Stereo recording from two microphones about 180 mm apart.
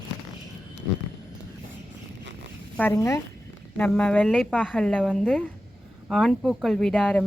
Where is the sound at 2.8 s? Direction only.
15° left (ahead or behind).